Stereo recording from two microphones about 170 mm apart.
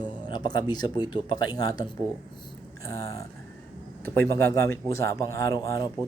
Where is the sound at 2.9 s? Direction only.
20° left (ahead or behind).